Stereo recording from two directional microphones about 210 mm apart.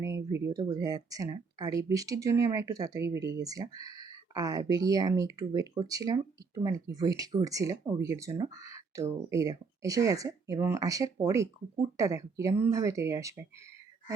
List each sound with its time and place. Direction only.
0.0 s speech: 15° right (ahead or behind)